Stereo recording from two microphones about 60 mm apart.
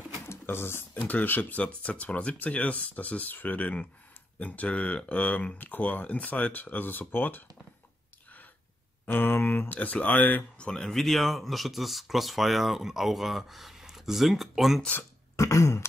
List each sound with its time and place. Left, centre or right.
0.3 s a sound: left
0.9 s speech: left
9.0 s speech: left
10.6 s speech: centre
15.3 s throat clearing: left